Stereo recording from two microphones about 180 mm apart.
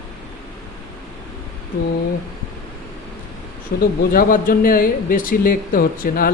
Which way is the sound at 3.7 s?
60° left (ahead or behind).